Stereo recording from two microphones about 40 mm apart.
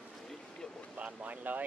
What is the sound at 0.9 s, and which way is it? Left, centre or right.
Speech, right.